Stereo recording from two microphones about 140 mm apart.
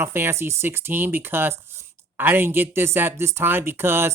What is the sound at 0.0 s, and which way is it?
Speech, 15° right (ahead or behind).